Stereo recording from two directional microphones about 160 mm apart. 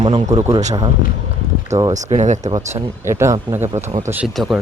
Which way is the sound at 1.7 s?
45° right (ahead or behind).